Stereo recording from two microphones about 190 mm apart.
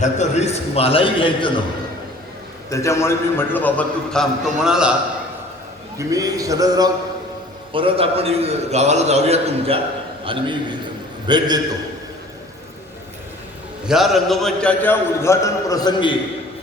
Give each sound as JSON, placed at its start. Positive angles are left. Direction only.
{"t": 0.0, "sound": "a man's voice", "side_deg": 35}
{"t": 2.6, "sound": "a man's voice", "side_deg": 15}
{"t": 6.0, "sound": "a man's voice", "side_deg": -20}
{"t": 13.8, "sound": "a man's voice", "side_deg": 0}